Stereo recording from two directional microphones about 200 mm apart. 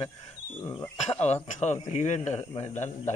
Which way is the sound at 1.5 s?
35° left (ahead or behind).